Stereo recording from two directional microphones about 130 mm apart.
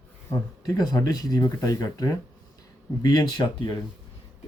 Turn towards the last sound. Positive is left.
turn(degrees=35)  # may be behind; listen again after turning